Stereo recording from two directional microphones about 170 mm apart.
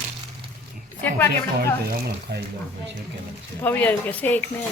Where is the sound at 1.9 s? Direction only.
75° right (ahead or behind).